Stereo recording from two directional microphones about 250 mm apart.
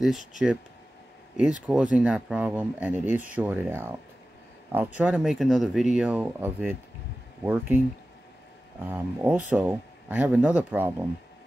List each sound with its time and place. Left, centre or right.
0.0 s speech: centre
8.8 s speech: centre